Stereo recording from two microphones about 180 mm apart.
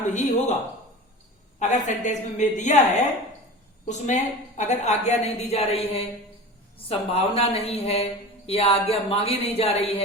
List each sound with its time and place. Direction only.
0.1 s a woman's voice: 40° left (ahead or behind)
1.5 s a woman's voice: 40° left (ahead or behind)